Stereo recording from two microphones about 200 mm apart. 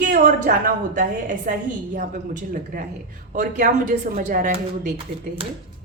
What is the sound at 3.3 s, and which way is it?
A woman's voice, 40° right (ahead or behind).